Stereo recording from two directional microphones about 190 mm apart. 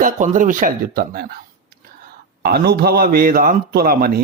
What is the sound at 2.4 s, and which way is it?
A man's voice, 55° right (ahead or behind).